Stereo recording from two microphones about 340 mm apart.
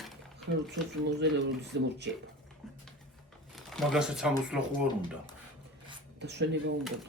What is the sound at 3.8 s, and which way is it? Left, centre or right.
Speech, centre.